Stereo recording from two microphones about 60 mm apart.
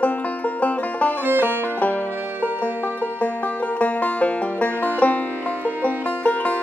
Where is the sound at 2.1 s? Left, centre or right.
Right.